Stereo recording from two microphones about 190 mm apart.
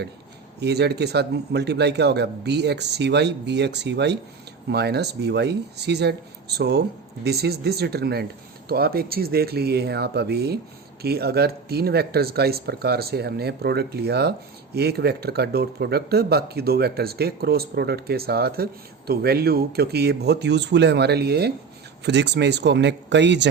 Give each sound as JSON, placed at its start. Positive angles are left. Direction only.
{"t": 0.6, "sound": "speech", "side_deg": -60}